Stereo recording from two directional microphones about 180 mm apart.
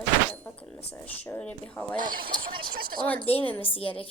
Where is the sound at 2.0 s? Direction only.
50° right (ahead or behind).